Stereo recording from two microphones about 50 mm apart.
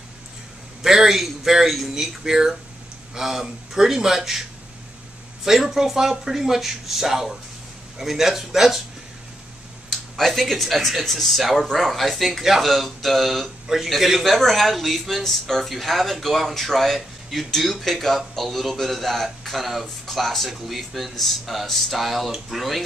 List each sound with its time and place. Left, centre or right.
0.8 s speech: centre
5.4 s speech: centre
9.8 s speech: centre